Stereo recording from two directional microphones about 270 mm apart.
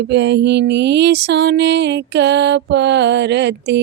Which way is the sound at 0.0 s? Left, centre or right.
Right.